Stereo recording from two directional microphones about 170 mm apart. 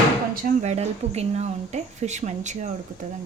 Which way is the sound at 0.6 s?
40° right (ahead or behind).